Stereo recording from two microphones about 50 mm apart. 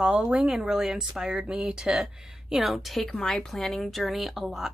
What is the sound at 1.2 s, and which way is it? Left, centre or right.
A woman's voice, centre.